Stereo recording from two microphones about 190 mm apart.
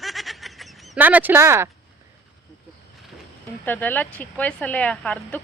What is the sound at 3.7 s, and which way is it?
Speech, 10° left (ahead or behind).